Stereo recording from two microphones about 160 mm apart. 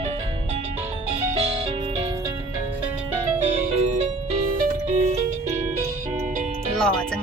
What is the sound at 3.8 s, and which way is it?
Music, 40° right (ahead or behind).